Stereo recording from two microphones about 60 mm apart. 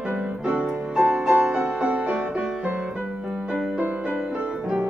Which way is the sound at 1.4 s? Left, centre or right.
Centre.